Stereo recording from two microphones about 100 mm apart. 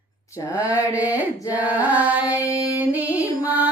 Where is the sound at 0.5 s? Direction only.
15° right (ahead or behind).